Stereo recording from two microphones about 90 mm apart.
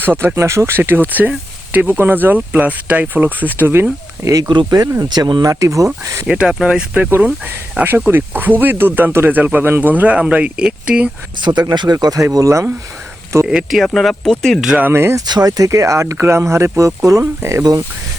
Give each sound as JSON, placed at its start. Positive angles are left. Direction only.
{"t": 0.0, "sound": "speech", "side_deg": -20}
{"t": 4.4, "sound": "speech", "side_deg": -60}
{"t": 4.9, "sound": "speech", "side_deg": -45}
{"t": 6.3, "sound": "speech", "side_deg": -10}
{"t": 11.3, "sound": "speech", "side_deg": -55}
{"t": 12.2, "sound": "speech", "side_deg": -35}
{"t": 13.5, "sound": "speech", "side_deg": -5}
{"t": 14.8, "sound": "speech", "side_deg": -25}
{"t": 15.3, "sound": "speech", "side_deg": -45}